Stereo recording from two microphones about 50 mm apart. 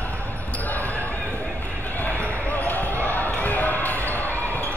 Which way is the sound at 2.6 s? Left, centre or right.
Left.